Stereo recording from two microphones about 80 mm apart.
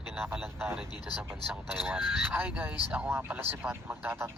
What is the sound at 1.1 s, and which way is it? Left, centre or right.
Speech, left.